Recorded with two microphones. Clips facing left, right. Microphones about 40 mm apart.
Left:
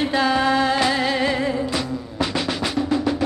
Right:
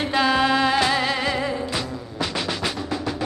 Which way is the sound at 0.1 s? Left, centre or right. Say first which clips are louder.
Right 2 dB; right.